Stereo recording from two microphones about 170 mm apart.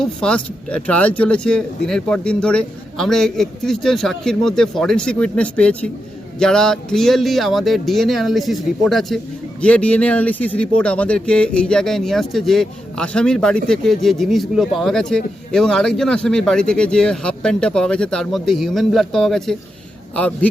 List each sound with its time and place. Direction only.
0.0 s a man's voice: 5° left (ahead or behind)